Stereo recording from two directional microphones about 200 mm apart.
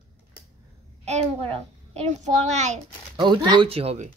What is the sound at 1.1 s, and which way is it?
A child's voice, 30° right (ahead or behind).